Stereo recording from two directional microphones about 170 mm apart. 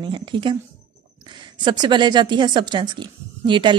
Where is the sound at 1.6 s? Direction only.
25° right (ahead or behind).